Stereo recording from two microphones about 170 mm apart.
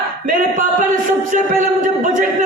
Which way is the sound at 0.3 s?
50° right (ahead or behind).